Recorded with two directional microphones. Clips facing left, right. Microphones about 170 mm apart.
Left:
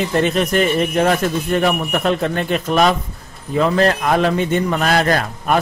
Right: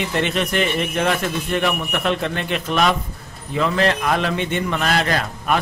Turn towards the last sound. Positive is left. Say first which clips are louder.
# left 4 dB
turn(degrees=45)  # may be behind; listen again after turning